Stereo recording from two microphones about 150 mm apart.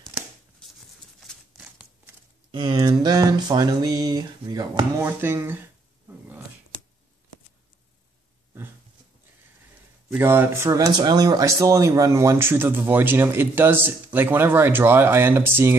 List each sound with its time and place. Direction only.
1.2 s a sound: 5° right (ahead or behind)
2.5 s speech: 30° right (ahead or behind)
5.0 s speech: 15° right (ahead or behind)
6.0 s dog: 10° right (ahead or behind)
10.0 s speech: 15° right (ahead or behind)